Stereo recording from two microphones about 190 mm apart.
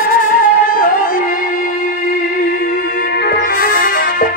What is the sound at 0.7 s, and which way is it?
Music, 45° left (ahead or behind).